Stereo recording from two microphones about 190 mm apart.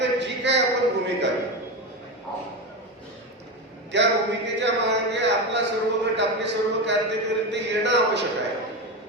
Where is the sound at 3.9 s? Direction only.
65° right (ahead or behind).